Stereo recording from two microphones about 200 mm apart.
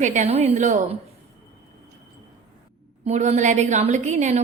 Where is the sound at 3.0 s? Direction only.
35° right (ahead or behind).